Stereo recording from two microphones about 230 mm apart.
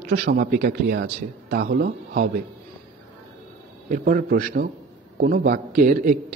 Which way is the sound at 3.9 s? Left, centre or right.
Right.